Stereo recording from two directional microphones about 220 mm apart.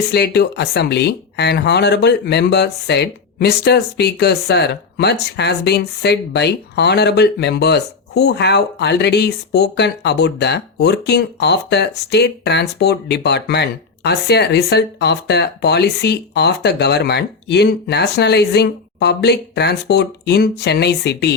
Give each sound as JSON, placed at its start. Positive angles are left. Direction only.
{"t": 0.1, "sound": "speech", "side_deg": 50}